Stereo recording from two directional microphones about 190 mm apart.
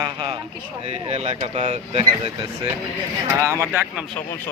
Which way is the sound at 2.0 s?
20° right (ahead or behind).